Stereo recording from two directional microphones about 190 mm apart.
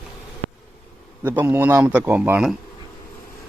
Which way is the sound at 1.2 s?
10° right (ahead or behind).